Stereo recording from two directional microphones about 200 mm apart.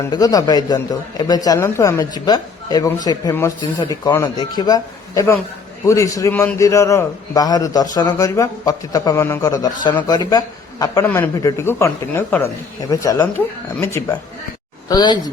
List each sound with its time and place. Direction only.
0.0 s a man's voice: 20° left (ahead or behind)